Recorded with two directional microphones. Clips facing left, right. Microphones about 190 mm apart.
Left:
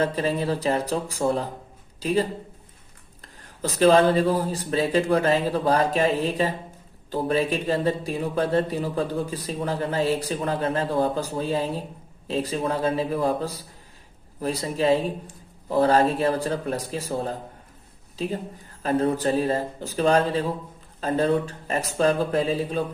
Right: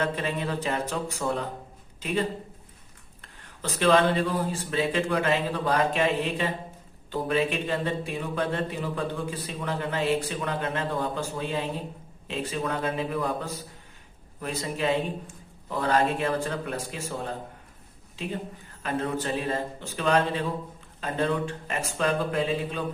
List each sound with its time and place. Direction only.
0.0 s a man's voice: 35° left (ahead or behind)
3.4 s speech: 35° left (ahead or behind)